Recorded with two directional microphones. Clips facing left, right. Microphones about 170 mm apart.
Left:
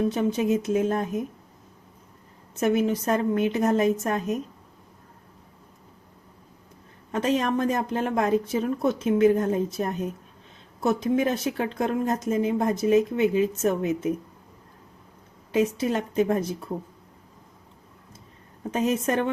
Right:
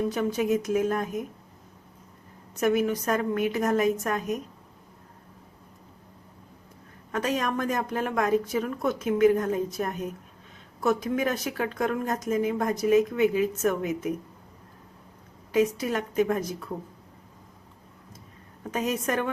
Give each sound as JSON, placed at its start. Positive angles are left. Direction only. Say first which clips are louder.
{"t": 0.1, "sound": "speech", "louder": "left 2 dB", "side_deg": 25}
{"t": 2.6, "sound": "speech", "louder": "left 1 dB", "side_deg": 25}
{"t": 7.1, "sound": "speech", "louder": "left 4 dB", "side_deg": 30}
{"t": 15.5, "sound": "speech", "louder": "left 1 dB", "side_deg": 30}
{"t": 18.7, "sound": "speech", "louder": "left 3 dB", "side_deg": 25}